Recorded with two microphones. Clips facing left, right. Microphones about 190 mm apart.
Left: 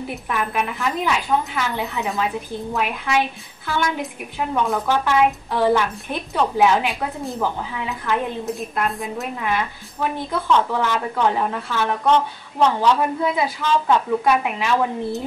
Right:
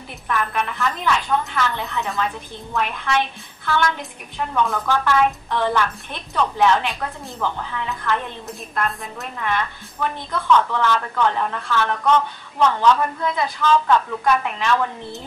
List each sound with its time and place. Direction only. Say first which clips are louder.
0.1 s a woman's voice: right 2 dB; 10° left (ahead or behind)
12.0 s speech: left 1 dB; 25° left (ahead or behind)
12.6 s a woman's voice: even; 10° left (ahead or behind)